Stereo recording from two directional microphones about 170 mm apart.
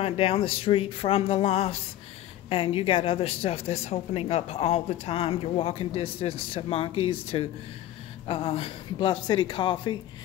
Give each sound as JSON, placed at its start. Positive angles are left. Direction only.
{"t": 0.0, "sound": "a woman's voice", "side_deg": 35}